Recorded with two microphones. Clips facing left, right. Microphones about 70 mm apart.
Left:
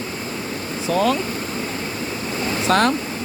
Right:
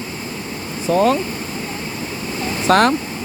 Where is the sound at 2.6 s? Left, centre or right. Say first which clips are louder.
Right 4 dB; right.